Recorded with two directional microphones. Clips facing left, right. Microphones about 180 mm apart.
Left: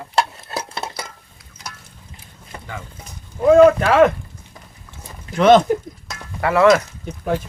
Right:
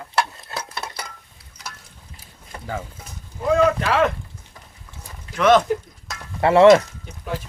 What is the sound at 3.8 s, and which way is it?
Speech, 50° left (ahead or behind).